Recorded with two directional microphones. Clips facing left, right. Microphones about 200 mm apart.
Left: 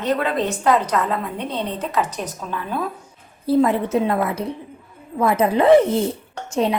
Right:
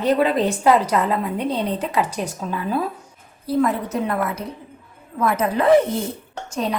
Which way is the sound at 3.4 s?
25° left (ahead or behind).